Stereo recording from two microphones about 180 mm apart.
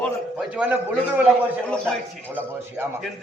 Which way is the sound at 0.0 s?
5° right (ahead or behind).